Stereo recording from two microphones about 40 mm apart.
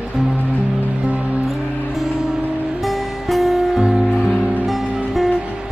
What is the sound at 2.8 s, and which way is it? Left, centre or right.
Music, centre.